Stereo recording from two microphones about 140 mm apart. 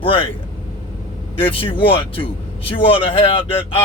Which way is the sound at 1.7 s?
40° left (ahead or behind).